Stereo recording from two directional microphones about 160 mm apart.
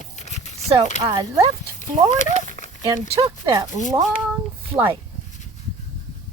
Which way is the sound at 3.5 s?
20° right (ahead or behind).